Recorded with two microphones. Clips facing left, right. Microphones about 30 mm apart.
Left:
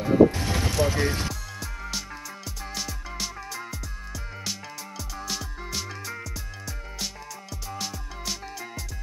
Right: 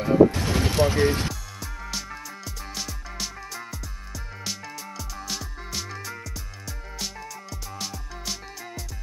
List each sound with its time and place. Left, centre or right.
0.0 s music: centre
0.4 s a sound: centre
0.7 s vehicle: right
0.9 s speech: centre
1.3 s music: centre
7.0 s music: centre